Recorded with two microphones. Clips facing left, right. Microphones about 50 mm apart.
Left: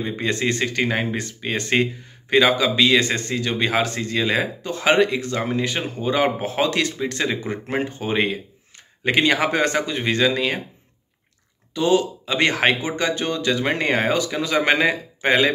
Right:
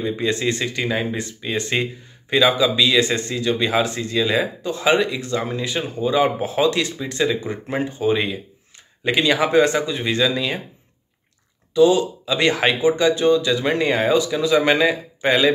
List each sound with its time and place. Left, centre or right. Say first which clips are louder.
0.2 s speech: left 2 dB; left
11.7 s speech: right 4 dB; left